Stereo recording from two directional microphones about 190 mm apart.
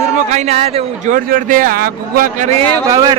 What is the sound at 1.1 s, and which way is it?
A man's voice, 45° right (ahead or behind).